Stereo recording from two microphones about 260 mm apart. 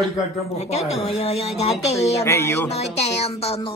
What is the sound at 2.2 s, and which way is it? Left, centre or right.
Speech, centre.